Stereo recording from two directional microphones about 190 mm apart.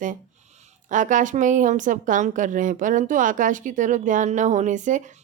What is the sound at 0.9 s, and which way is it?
A woman's voice, 40° right (ahead or behind).